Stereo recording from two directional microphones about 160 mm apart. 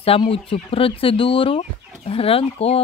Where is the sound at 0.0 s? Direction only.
35° left (ahead or behind).